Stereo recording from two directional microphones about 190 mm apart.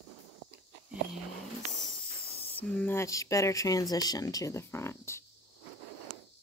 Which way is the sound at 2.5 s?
10° left (ahead or behind).